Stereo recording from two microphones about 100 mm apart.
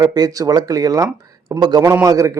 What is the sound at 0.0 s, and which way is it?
A man's voice, 40° right (ahead or behind).